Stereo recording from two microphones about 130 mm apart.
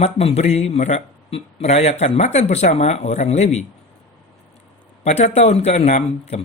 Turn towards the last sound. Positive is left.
turn(degrees=60)  # may be behind; listen again after turning